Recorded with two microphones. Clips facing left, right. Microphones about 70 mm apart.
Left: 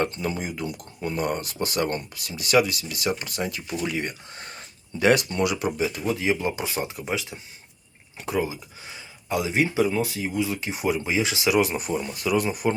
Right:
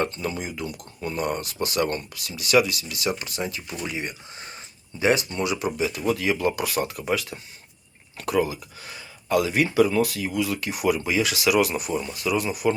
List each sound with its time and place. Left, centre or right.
0.0 s speech: left
6.1 s speech: left